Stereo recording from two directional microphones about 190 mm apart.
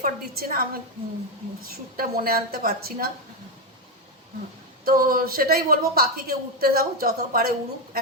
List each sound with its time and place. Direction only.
0.0 s a woman's voice: 50° right (ahead or behind)
4.9 s a woman's voice: 50° right (ahead or behind)